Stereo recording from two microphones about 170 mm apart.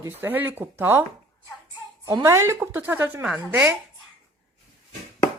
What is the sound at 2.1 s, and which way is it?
Speech, 20° right (ahead or behind).